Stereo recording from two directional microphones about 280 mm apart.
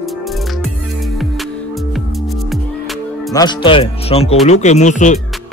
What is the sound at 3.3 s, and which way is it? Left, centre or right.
A man's voice, centre.